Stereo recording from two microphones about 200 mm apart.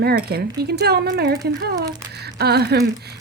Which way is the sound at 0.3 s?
50° right (ahead or behind).